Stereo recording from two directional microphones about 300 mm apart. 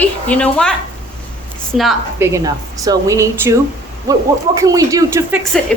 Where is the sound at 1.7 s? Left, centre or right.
Centre.